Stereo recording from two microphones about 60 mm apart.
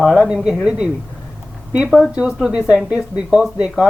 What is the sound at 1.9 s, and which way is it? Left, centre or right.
Speech, centre.